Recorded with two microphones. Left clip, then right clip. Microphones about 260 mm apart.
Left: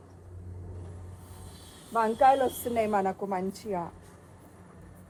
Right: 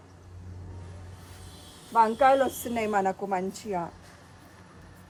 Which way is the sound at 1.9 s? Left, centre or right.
Right.